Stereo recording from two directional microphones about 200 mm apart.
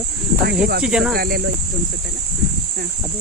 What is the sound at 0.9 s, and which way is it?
Speech, 5° right (ahead or behind).